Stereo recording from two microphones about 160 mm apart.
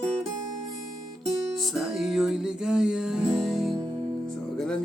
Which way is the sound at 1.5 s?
Centre (ahead or behind).